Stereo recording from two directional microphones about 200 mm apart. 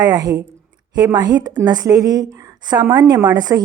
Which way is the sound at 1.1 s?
20° right (ahead or behind).